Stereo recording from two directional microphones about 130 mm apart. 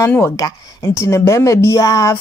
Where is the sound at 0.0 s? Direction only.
20° left (ahead or behind).